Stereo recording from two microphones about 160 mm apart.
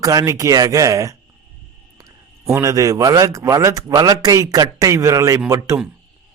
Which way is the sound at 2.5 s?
20° right (ahead or behind).